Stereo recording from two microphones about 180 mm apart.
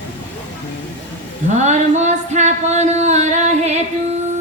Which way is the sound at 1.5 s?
40° right (ahead or behind).